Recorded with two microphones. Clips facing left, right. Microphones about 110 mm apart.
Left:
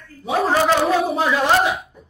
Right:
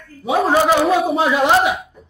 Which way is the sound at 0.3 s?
10° right (ahead or behind).